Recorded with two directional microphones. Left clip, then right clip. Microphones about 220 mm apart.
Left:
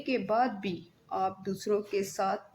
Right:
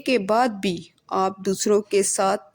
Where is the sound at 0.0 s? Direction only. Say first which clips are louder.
Right 8 dB; 40° right (ahead or behind).